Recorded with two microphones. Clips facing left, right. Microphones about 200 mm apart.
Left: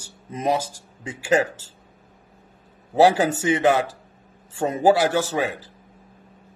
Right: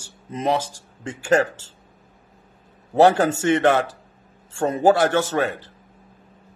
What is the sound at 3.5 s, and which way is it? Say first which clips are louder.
Speech: even; 5° left (ahead or behind).